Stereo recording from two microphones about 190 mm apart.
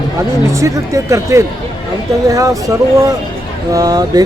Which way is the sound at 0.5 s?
15° right (ahead or behind).